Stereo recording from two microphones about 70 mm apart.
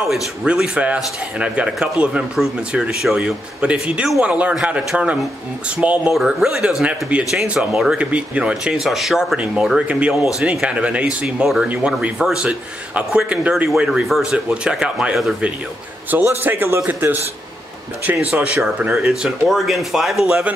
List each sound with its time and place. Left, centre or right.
0.1 s a man's voice: centre
6.1 s speech: centre
7.5 s speech: centre
8.0 s speech: centre
8.7 s speech: centre
9.8 s speech: centre
13.8 s speech: centre
16.1 s a man's voice: right
18.9 s speech: centre